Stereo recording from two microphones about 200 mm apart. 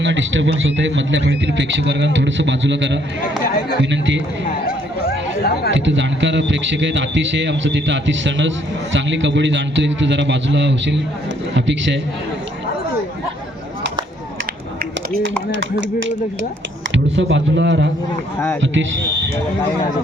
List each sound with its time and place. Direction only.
0.0 s speech: 65° right (ahead or behind)
3.2 s speech: 45° left (ahead or behind)
3.8 s speech: 65° right (ahead or behind)
4.4 s chatter: 50° left (ahead or behind)
5.7 s speech: 65° right (ahead or behind)
16.9 s speech: 65° right (ahead or behind)